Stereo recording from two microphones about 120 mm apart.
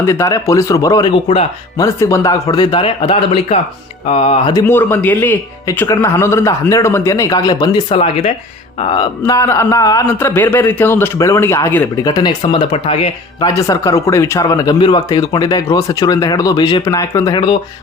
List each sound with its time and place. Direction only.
0.0 s a man's voice: 25° left (ahead or behind)
1.1 s speech: 50° left (ahead or behind)
1.8 s a man's voice: 25° left (ahead or behind)
2.7 s speech: 45° left (ahead or behind)
4.0 s speech: 60° left (ahead or behind)
4.7 s a man's voice: 20° left (ahead or behind); by 9.0 s 45° left (ahead or behind)
9.2 s a man's voice: 30° left (ahead or behind)
10.2 s a man's voice: 20° left (ahead or behind)
12.0 s speech: 35° left (ahead or behind); by 13.1 s 50° left (ahead or behind)
13.4 s speech: 25° left (ahead or behind)
17.3 s speech: 40° left (ahead or behind)